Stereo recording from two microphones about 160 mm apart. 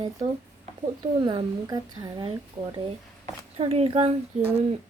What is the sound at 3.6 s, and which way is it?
Speech, 40° right (ahead or behind).